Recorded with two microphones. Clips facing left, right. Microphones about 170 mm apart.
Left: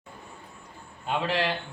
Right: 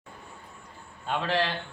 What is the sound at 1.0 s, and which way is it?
Speech, 15° left (ahead or behind).